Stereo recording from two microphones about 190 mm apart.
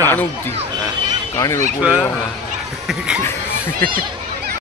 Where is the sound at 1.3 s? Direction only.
15° left (ahead or behind).